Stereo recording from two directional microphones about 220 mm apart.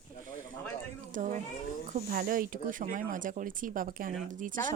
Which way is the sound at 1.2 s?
35° right (ahead or behind).